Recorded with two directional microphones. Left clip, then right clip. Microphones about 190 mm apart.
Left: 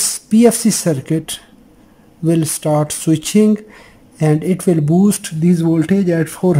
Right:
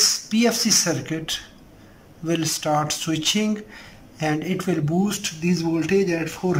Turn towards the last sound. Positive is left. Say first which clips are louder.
# left 8 dB
turn(degrees=35)  # may be behind; listen again after turning